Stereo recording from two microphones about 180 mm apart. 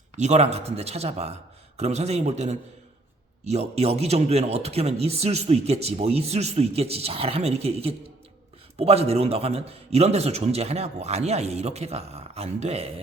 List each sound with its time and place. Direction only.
0.2 s speech: 40° right (ahead or behind)